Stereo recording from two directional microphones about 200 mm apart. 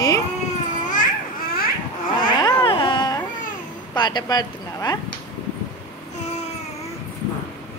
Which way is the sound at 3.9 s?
20° left (ahead or behind).